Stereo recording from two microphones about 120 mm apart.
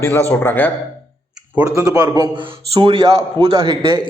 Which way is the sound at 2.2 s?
40° right (ahead or behind).